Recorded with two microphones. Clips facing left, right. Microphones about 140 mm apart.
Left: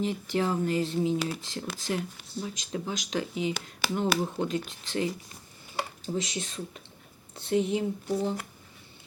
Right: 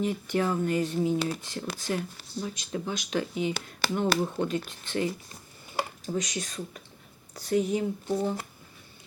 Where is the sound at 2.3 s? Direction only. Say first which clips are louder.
Right 1 dB; 30° left (ahead or behind).